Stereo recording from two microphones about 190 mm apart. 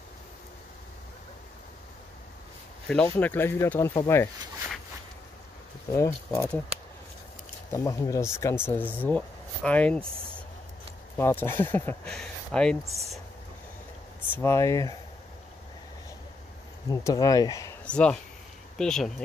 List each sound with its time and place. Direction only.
2.9 s speech: 5° left (ahead or behind)
5.9 s speech: 15° left (ahead or behind)
7.7 s speech: 15° left (ahead or behind)
11.1 s speech: 10° left (ahead or behind)
14.3 s speech: 15° left (ahead or behind)
16.9 s speech: 20° left (ahead or behind)
17.8 s speech: 5° left (ahead or behind)